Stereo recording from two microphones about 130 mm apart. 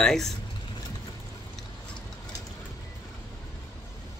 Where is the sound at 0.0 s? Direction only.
5° left (ahead or behind).